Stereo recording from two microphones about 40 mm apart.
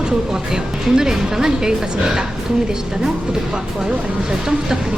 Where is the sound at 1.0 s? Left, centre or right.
Centre.